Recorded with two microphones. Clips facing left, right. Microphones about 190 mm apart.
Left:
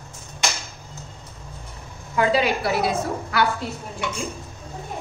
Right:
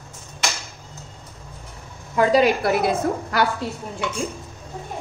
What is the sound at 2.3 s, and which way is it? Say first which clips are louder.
A woman's voice: right 6 dB; 50° right (ahead or behind).